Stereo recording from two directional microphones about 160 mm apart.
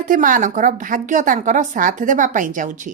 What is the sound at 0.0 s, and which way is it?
Speech, 60° right (ahead or behind).